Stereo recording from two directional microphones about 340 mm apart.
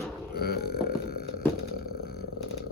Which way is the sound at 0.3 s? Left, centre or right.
Left.